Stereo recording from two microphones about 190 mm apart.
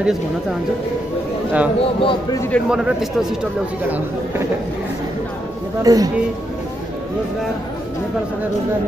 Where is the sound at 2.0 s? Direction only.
25° left (ahead or behind).